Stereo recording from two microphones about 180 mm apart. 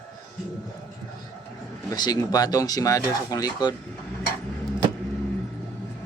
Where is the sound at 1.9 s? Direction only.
20° left (ahead or behind).